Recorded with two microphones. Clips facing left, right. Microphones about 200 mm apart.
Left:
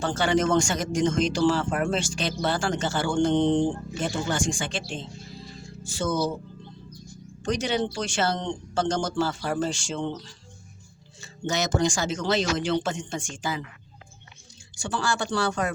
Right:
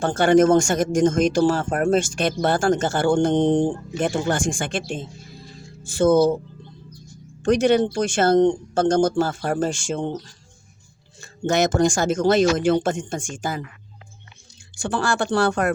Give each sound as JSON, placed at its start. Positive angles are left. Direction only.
{"t": 0.0, "sound": "speech", "side_deg": -50}
{"t": 7.4, "sound": "speech", "side_deg": -55}
{"t": 14.8, "sound": "speech", "side_deg": -60}